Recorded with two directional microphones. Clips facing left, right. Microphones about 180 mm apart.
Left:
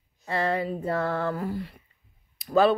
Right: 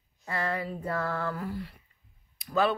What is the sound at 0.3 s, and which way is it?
Speech, 25° left (ahead or behind).